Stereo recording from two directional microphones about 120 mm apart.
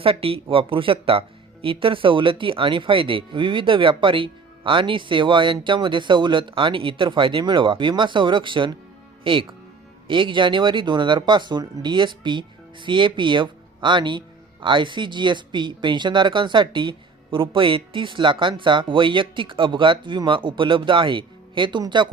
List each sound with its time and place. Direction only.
0.0 s speech: 50° right (ahead or behind)